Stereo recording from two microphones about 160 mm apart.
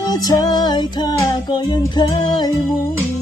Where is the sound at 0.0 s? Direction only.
25° left (ahead or behind).